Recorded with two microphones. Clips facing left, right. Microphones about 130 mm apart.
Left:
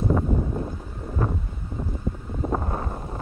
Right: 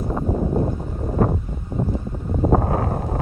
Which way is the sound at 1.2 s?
55° right (ahead or behind).